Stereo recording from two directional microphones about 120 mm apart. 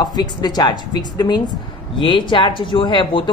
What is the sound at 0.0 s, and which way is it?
Speech, 35° left (ahead or behind).